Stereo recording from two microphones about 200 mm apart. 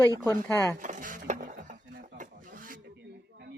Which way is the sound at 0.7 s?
40° right (ahead or behind).